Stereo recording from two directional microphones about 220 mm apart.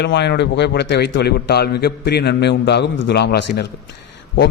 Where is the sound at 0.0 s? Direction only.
50° left (ahead or behind).